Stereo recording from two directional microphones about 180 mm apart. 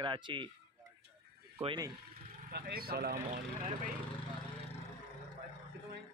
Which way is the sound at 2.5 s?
60° right (ahead or behind).